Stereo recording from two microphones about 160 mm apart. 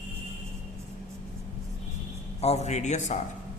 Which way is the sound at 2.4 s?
40° left (ahead or behind).